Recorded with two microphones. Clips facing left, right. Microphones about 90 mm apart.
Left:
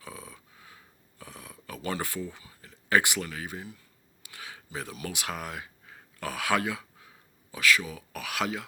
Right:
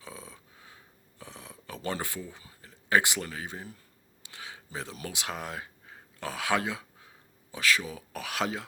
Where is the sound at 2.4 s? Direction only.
35° right (ahead or behind).